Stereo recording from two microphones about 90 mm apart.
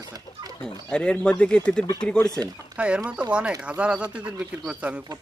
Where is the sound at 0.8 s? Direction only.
10° left (ahead or behind).